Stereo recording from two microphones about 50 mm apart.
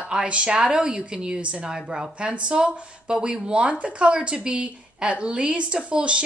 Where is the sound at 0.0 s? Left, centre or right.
Right.